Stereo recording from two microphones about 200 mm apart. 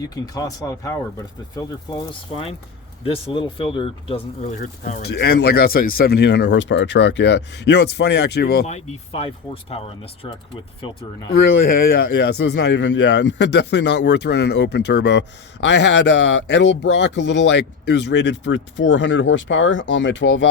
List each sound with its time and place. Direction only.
0.0 s speech: 20° left (ahead or behind); by 8.6 s 55° left (ahead or behind)
8.6 s speech: 30° left (ahead or behind)
11.9 s speech: 55° left (ahead or behind)